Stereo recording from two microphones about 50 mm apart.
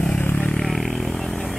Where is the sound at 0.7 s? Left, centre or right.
Centre.